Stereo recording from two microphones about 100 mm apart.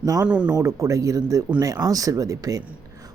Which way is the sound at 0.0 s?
35° right (ahead or behind).